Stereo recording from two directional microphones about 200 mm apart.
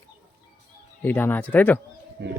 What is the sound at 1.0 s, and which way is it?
Speech, 10° left (ahead or behind).